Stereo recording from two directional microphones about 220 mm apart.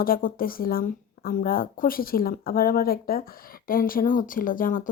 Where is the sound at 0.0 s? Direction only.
40° left (ahead or behind).